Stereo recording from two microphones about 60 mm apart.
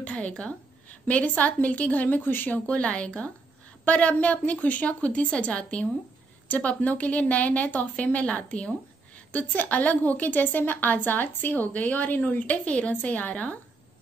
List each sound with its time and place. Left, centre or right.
0.0 s a woman's voice: centre
2.6 s a woman's voice: centre